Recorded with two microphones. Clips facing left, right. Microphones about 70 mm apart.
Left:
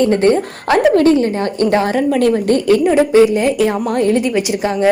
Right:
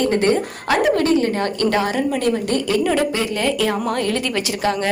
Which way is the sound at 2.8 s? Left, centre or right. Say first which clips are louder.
Left 9 dB; left.